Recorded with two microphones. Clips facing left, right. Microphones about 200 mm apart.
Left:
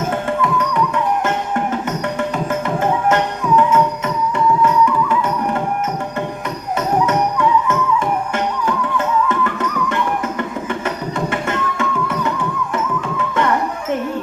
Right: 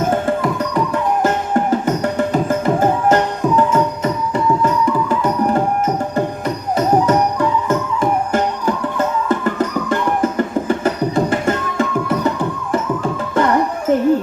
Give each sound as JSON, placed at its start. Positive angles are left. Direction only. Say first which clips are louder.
{"t": 0.1, "sound": "music", "louder": "right 2 dB", "side_deg": -35}
{"t": 2.1, "sound": "music", "louder": "right 3 dB", "side_deg": -35}
{"t": 6.7, "sound": "music", "louder": "right 3 dB", "side_deg": -35}